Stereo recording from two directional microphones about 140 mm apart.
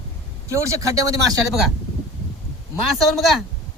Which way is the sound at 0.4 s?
20° right (ahead or behind).